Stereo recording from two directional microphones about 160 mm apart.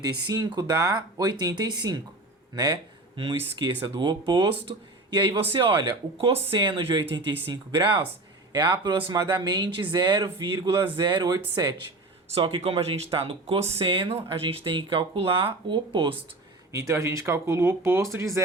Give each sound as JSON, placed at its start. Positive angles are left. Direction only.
{"t": 0.0, "sound": "speech", "side_deg": -25}
{"t": 3.2, "sound": "speech", "side_deg": -30}
{"t": 16.7, "sound": "speech", "side_deg": -20}